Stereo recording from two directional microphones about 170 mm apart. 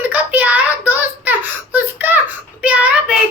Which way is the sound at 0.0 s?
10° right (ahead or behind).